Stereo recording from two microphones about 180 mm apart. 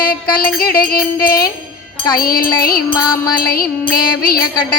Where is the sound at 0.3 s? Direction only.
55° left (ahead or behind).